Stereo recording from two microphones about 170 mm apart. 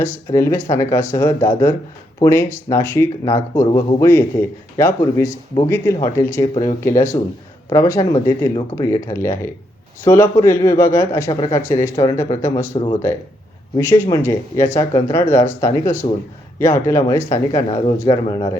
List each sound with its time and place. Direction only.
0.0 s speech: 15° left (ahead or behind)
4.8 s speech: 15° left (ahead or behind)
6.4 s speech: 25° left (ahead or behind)
6.8 s speech: 15° left (ahead or behind)
11.3 s speech: 30° left (ahead or behind)
13.7 s speech: 20° left (ahead or behind)
16.0 s a man's voice: 30° left (ahead or behind)
16.6 s speech: 15° left (ahead or behind)